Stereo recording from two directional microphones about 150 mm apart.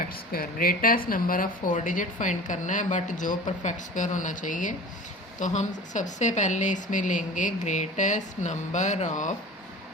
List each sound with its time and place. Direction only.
0.3 s a woman's voice: 75° left (ahead or behind); by 9.3 s 55° left (ahead or behind)